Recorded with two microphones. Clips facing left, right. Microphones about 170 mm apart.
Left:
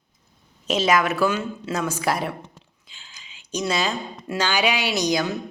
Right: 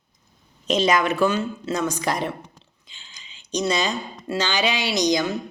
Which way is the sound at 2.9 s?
5° left (ahead or behind).